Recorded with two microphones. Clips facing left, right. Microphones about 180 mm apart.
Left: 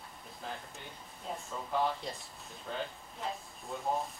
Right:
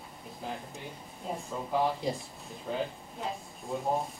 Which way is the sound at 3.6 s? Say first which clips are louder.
Right 4 dB; 15° right (ahead or behind).